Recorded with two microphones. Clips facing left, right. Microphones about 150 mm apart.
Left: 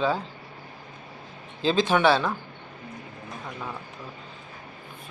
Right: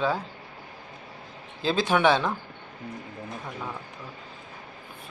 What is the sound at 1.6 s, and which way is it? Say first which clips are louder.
Speech: left 1 dB; 10° right (ahead or behind).